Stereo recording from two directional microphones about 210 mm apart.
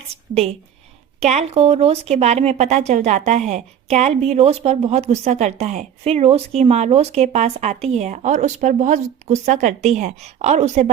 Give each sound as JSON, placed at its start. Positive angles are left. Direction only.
{"t": 1.2, "sound": "a woman's voice", "side_deg": -35}